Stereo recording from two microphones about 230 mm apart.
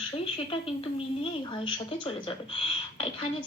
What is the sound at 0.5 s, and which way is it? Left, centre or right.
A woman's voice, left.